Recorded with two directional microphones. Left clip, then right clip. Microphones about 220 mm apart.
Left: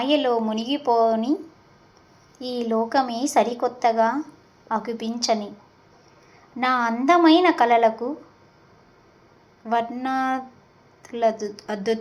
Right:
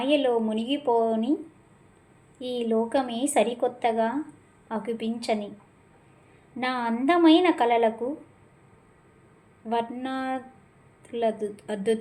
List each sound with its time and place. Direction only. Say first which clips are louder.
0.0 s a woman's voice: left 2 dB; centre (ahead or behind)
2.9 s a woman's voice: left 4 dB; centre (ahead or behind)
6.6 s a woman's voice: left 6 dB; centre (ahead or behind)
9.6 s a woman's voice: left 5 dB; centre (ahead or behind)